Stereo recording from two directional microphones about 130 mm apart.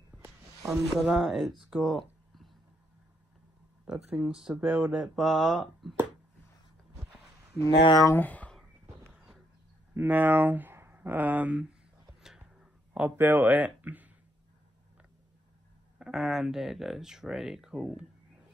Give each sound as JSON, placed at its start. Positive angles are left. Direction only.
{"t": 0.6, "sound": "speech", "side_deg": -5}
{"t": 1.7, "sound": "a sound", "side_deg": 0}
{"t": 3.8, "sound": "speech", "side_deg": -5}
{"t": 7.8, "sound": "speech", "side_deg": 30}
{"t": 8.2, "sound": "speech", "side_deg": 10}
{"t": 9.9, "sound": "speech", "side_deg": -15}
{"t": 12.2, "sound": "a sound", "side_deg": -5}
{"t": 12.9, "sound": "speech", "side_deg": -15}
{"t": 16.0, "sound": "speech", "side_deg": -5}